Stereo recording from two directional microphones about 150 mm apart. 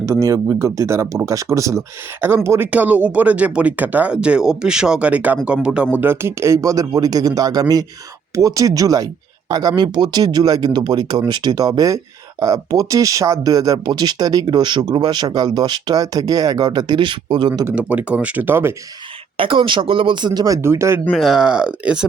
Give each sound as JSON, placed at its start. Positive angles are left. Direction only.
{"t": 0.0, "sound": "speech", "side_deg": -20}
{"t": 17.7, "sound": "speech", "side_deg": -10}
{"t": 19.4, "sound": "speech", "side_deg": -35}
{"t": 21.1, "sound": "speech", "side_deg": -5}